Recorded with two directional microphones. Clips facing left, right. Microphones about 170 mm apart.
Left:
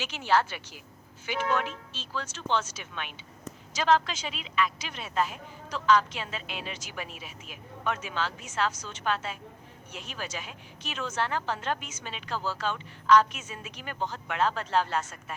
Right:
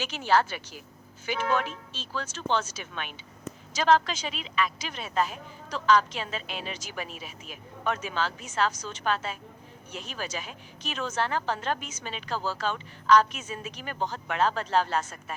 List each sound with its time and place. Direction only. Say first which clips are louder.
0.0 s a woman's voice: right 2 dB; 40° right (ahead or behind)